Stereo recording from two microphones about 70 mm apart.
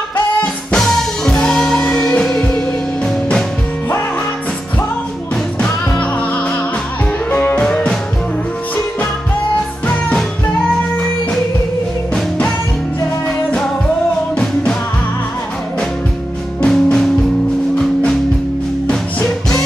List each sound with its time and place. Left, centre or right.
0.7 s drum kit: centre
1.3 s music: centre
5.6 s music: left
14.3 s music: centre
16.6 s music: centre
18.9 s music: centre